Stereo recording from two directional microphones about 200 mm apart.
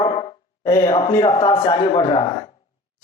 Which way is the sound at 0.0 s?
20° left (ahead or behind).